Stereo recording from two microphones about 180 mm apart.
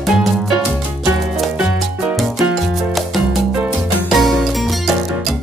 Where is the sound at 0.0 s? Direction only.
Centre (ahead or behind).